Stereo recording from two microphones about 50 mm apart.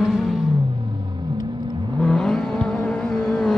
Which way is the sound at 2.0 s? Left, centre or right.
Centre.